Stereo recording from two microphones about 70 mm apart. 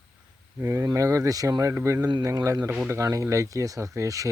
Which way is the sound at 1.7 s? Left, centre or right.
Right.